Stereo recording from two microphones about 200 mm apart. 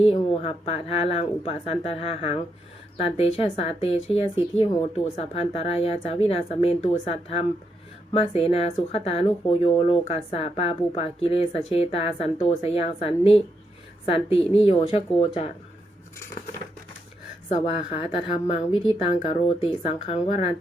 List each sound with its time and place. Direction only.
0.0 s speech: 30° left (ahead or behind)
18.0 s speech: 25° left (ahead or behind)